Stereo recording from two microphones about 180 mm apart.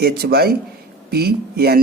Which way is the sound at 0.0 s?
60° right (ahead or behind).